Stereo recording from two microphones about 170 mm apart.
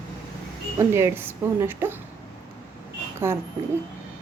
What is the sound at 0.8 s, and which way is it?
Speech, 15° right (ahead or behind).